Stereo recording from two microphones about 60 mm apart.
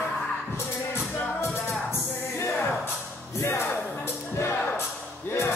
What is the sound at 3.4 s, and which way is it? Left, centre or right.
Music, left.